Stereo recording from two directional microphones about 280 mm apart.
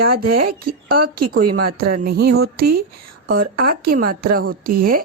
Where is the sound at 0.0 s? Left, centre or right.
Right.